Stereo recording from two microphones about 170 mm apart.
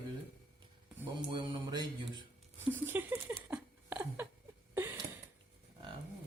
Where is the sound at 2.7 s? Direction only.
10° right (ahead or behind).